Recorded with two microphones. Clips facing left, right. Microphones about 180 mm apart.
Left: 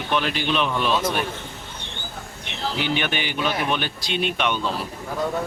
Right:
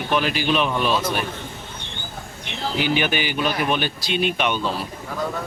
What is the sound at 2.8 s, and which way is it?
Speech, 5° right (ahead or behind).